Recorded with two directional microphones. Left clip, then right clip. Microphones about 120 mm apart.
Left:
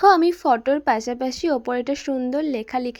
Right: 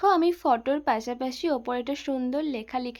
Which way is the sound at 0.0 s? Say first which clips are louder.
Left 7 dB; 40° left (ahead or behind).